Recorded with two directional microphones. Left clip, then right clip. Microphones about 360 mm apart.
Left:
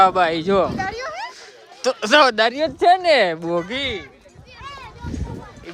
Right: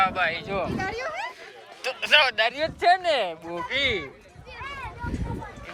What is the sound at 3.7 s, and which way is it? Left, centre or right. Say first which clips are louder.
Speech: even; centre.